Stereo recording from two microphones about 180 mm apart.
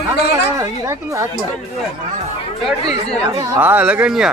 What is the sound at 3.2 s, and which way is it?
Speech, 20° right (ahead or behind).